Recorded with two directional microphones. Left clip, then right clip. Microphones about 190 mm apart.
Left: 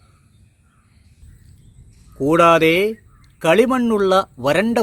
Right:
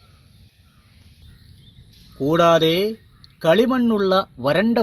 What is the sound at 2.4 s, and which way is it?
A man's voice, 10° left (ahead or behind).